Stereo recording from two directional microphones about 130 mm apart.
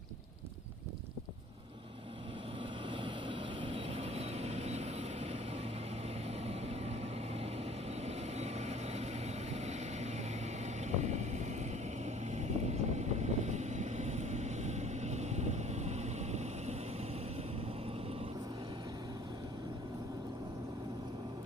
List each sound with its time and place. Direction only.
2.9 s vehicle: 40° right (ahead or behind)
6.4 s vehicle: 55° right (ahead or behind)
8.0 s vehicle: 55° right (ahead or behind)
10.8 s boat: 60° right (ahead or behind)
12.0 s vehicle: 60° right (ahead or behind)